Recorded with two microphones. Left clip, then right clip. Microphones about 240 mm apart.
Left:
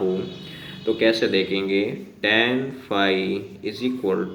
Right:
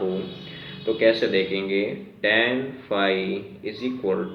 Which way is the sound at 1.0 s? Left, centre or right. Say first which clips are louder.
Even; left.